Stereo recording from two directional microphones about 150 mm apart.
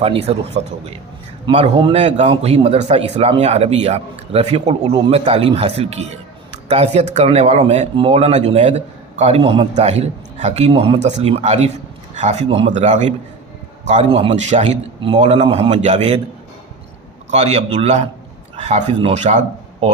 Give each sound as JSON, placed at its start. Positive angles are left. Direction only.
{"t": 0.0, "sound": "a man's voice", "side_deg": -40}
{"t": 9.7, "sound": "a man's voice", "side_deg": -45}
{"t": 15.0, "sound": "a man's voice", "side_deg": -40}
{"t": 17.3, "sound": "a man's voice", "side_deg": -45}